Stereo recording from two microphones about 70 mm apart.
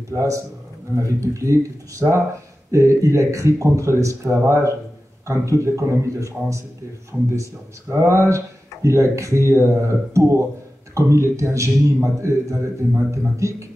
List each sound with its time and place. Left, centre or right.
0.1 s speech: right